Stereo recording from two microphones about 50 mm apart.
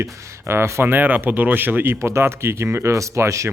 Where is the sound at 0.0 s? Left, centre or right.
Right.